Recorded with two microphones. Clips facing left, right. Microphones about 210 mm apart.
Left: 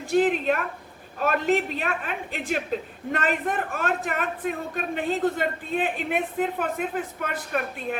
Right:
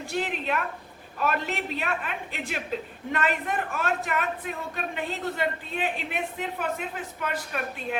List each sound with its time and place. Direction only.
0.1 s a man's voice: 45° left (ahead or behind)